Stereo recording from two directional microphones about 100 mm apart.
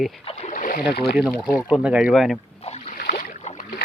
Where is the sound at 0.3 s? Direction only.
70° left (ahead or behind).